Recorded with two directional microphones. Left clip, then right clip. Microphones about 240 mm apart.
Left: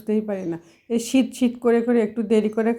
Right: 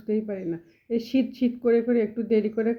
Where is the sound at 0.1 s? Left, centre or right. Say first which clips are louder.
Left 4 dB; centre.